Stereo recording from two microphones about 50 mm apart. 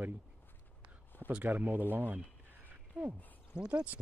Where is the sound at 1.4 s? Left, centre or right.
Right.